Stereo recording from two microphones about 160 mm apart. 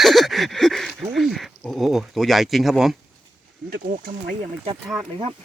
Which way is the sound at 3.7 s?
65° right (ahead or behind).